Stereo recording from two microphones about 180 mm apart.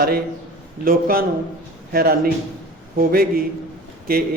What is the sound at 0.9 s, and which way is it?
Speech, 55° right (ahead or behind).